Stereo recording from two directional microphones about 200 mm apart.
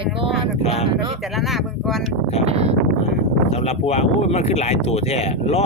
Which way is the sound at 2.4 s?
30° right (ahead or behind).